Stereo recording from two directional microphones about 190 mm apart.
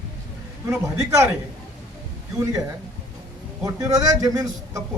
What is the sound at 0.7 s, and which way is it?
Speech, 15° right (ahead or behind).